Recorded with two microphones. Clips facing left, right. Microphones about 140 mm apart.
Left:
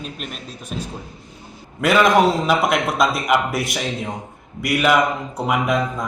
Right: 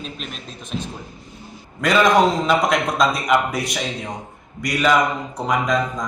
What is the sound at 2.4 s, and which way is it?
A man's voice, 5° left (ahead or behind).